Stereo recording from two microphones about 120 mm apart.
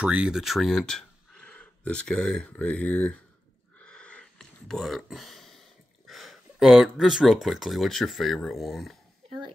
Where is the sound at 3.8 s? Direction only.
10° left (ahead or behind).